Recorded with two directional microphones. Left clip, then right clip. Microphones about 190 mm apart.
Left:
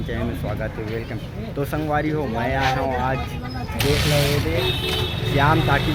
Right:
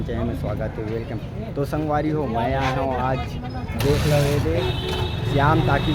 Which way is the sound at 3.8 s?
40° right (ahead or behind).